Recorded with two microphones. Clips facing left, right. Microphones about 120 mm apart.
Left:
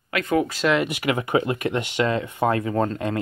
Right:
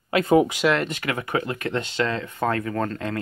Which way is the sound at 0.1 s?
30° right (ahead or behind).